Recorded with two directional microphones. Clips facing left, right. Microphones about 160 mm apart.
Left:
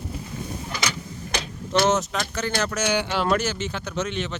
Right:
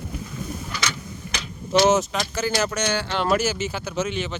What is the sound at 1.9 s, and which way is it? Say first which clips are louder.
Speech: right 3 dB; centre (ahead or behind).